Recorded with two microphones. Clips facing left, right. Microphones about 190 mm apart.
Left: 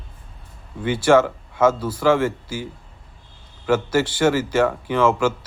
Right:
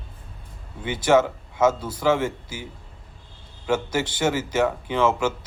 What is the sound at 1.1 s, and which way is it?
A man's voice, 15° right (ahead or behind).